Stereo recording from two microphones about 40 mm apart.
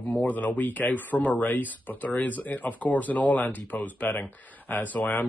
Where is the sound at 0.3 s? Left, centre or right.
Left.